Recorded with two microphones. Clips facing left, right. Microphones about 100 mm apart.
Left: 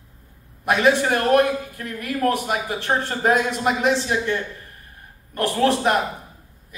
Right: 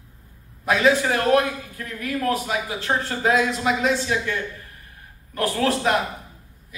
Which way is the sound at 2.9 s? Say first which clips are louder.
Left 1 dB; 20° left (ahead or behind).